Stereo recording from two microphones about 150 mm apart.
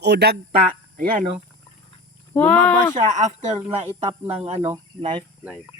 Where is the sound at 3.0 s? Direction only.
55° right (ahead or behind).